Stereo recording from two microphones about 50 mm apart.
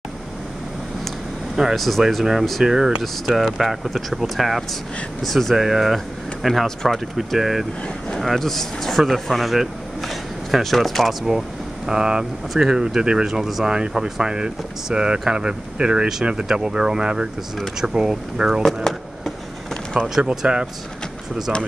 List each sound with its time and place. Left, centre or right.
1.8 s speech: centre
2.6 s speech: centre
3.0 s speech: centre
7.3 s speech: centre
11.2 s speech: centre
18.9 s a sound: centre
20.2 s speech: centre